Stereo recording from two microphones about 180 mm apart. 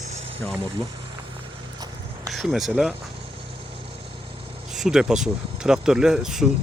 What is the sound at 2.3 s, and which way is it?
Speech, centre (ahead or behind).